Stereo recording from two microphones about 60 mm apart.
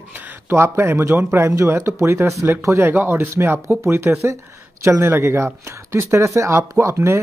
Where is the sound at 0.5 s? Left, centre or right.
Right.